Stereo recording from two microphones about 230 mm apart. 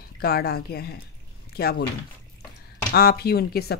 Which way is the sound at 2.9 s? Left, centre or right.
Left.